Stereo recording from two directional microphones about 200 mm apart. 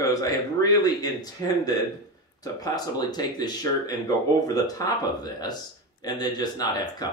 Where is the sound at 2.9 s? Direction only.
20° left (ahead or behind).